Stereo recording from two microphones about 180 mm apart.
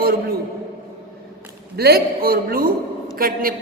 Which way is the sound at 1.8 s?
60° right (ahead or behind).